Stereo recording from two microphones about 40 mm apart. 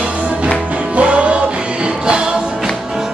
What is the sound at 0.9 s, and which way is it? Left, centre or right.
Music, right.